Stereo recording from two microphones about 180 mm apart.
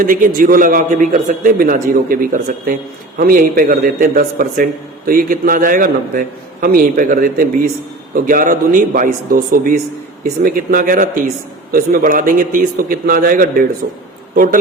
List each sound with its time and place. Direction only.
0.0 s a man's voice: 50° right (ahead or behind)
13.8 s speech: 70° right (ahead or behind)